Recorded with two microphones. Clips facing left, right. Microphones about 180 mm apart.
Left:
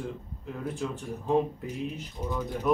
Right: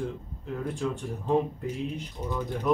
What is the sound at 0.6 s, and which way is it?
Speech, centre (ahead or behind).